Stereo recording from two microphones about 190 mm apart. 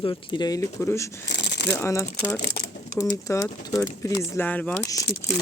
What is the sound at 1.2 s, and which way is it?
Shuffling cards, 65° left (ahead or behind).